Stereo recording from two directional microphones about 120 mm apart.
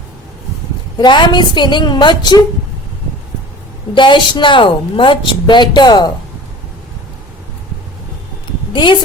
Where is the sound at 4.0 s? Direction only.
40° left (ahead or behind).